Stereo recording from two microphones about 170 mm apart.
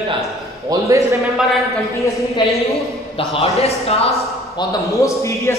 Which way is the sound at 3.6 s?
35° left (ahead or behind).